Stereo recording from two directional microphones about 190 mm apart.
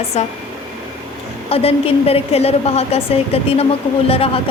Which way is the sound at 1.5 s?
30° left (ahead or behind).